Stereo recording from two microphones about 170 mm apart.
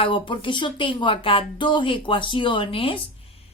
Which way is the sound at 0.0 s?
30° left (ahead or behind).